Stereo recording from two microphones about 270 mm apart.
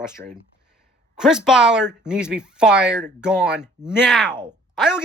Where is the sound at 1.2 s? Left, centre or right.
Centre.